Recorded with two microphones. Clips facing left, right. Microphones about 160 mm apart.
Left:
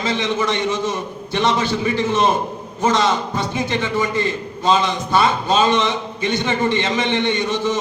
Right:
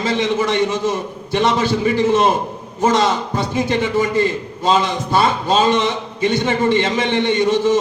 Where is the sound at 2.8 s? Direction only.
30° right (ahead or behind).